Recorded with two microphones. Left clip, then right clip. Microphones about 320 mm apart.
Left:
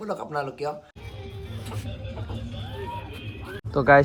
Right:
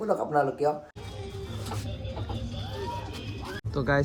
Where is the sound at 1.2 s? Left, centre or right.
Right.